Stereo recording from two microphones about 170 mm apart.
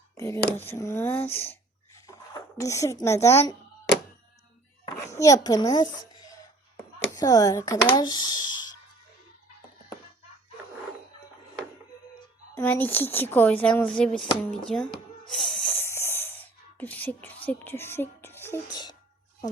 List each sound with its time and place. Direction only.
0.2 s speech: 15° left (ahead or behind)
2.6 s speech: 15° left (ahead or behind)
4.9 s a child's voice: 20° left (ahead or behind)
12.5 s speech: 10° left (ahead or behind)
15.2 s a sound: 5° left (ahead or behind)
16.7 s speech: 10° left (ahead or behind)
18.7 s speech: 25° left (ahead or behind)